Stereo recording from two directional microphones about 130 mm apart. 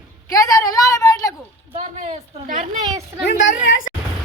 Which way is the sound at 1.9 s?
65° right (ahead or behind).